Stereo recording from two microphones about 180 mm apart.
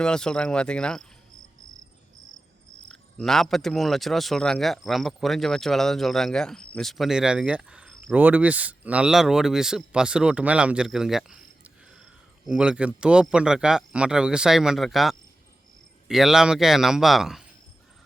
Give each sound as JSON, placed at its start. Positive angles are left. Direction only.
{"t": 0.0, "sound": "a man's voice", "side_deg": 5}
{"t": 2.9, "sound": "a man's voice", "side_deg": 0}